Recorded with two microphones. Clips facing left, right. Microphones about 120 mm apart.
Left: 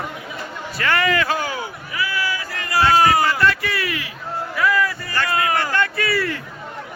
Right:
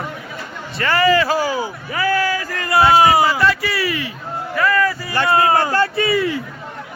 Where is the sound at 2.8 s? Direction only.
15° right (ahead or behind).